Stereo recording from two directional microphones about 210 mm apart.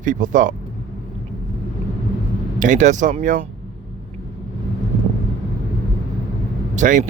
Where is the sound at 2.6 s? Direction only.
35° right (ahead or behind).